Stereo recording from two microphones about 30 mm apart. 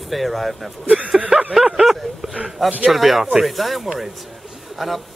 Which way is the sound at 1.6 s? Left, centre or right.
Centre.